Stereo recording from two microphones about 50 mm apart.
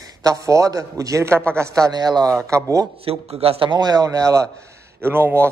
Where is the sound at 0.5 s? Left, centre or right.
Right.